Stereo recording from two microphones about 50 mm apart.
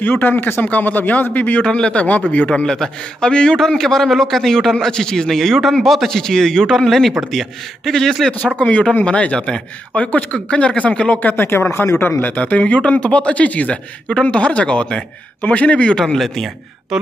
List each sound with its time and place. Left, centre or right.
0.0 s a man's voice: left
1.6 s speech: left
2.6 s a man's voice: centre
8.5 s a man's voice: left
11.7 s speech: left
12.4 s speech: left
16.2 s speech: centre